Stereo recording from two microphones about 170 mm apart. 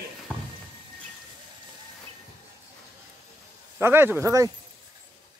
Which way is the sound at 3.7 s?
15° right (ahead or behind).